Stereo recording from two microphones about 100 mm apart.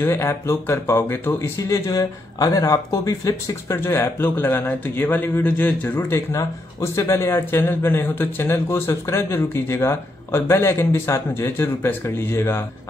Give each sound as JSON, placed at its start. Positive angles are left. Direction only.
{"t": 0.0, "sound": "speech", "side_deg": 25}